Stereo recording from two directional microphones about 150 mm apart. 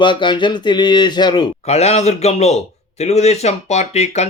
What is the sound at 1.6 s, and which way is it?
A man's voice, 45° left (ahead or behind).